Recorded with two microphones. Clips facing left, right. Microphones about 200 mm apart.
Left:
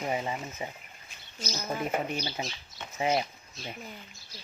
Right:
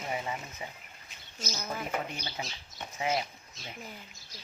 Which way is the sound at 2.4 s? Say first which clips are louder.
Left 3 dB; 25° left (ahead or behind).